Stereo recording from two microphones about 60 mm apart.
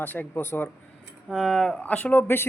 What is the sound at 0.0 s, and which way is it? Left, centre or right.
Speech, left.